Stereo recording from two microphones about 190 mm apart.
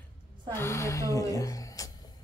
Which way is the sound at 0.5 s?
15° left (ahead or behind).